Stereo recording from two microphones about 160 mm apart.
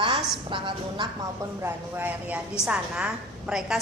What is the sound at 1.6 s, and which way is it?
A woman's voice, 10° right (ahead or behind).